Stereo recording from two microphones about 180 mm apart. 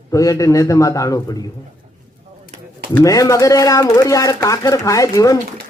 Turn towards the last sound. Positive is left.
turn(degrees=20)  # may be behind; listen again after turning